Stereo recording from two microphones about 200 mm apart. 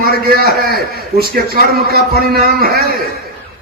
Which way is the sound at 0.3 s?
50° right (ahead or behind).